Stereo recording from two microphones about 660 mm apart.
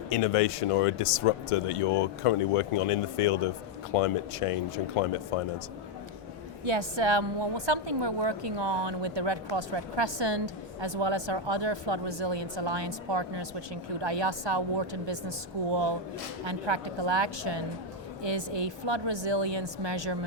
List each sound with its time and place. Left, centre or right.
0.1 s speech: left
6.7 s a woman's voice: right